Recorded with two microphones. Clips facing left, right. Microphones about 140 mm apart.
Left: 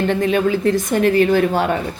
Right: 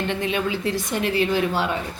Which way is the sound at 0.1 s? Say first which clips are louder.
Left 8 dB; 45° left (ahead or behind).